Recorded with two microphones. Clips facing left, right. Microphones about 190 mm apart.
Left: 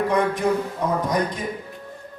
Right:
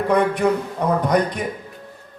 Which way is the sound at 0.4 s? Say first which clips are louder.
Right 2 dB; 70° right (ahead or behind).